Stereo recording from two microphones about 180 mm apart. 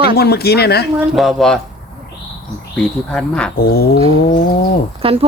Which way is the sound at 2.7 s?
5° left (ahead or behind).